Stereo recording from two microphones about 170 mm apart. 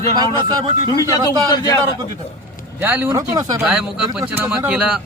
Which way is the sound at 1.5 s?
25° left (ahead or behind).